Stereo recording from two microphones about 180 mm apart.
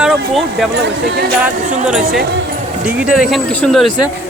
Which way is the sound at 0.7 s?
70° right (ahead or behind).